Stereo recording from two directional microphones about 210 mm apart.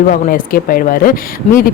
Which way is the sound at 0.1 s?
40° left (ahead or behind).